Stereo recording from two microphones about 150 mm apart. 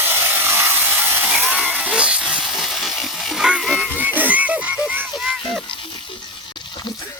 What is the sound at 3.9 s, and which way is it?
Music, 10° right (ahead or behind).